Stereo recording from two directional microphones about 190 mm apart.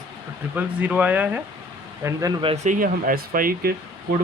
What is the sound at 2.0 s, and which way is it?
Speech, 20° right (ahead or behind).